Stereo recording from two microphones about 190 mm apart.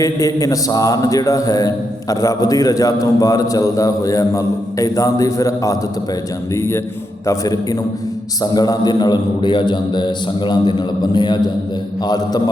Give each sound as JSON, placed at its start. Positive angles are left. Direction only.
{"t": 0.0, "sound": "a man's voice", "side_deg": 20}